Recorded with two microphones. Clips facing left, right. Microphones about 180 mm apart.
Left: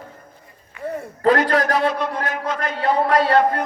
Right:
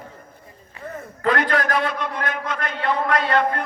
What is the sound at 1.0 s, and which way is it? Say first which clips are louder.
A man's voice: left 4 dB; 35° left (ahead or behind).